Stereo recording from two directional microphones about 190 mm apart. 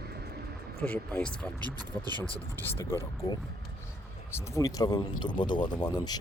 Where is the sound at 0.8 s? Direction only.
5° left (ahead or behind).